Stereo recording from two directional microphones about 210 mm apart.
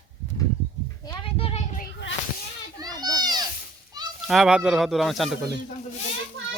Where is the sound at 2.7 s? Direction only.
20° right (ahead or behind).